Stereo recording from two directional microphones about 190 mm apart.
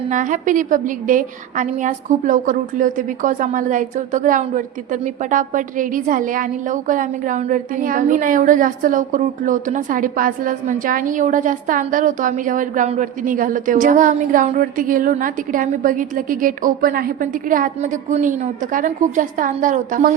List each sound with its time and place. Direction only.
0.1 s a woman's voice: 45° right (ahead or behind)